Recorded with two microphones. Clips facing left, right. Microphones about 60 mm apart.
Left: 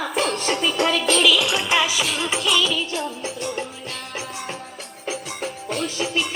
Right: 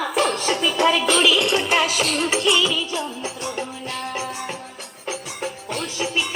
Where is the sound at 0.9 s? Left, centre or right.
Centre.